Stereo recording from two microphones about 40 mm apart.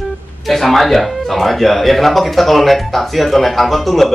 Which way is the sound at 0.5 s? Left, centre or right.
Centre.